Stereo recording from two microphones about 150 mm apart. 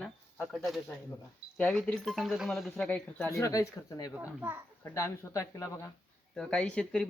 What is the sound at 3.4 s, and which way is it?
Speech, 20° left (ahead or behind).